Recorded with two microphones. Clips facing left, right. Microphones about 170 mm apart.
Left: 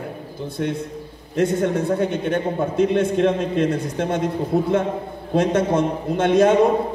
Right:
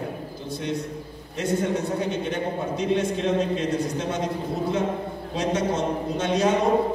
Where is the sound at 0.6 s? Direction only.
55° left (ahead or behind).